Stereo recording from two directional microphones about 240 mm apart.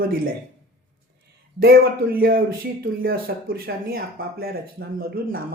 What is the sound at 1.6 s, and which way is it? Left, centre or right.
Speech, right.